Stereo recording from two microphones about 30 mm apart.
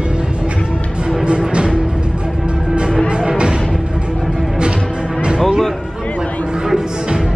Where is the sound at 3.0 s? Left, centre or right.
Right.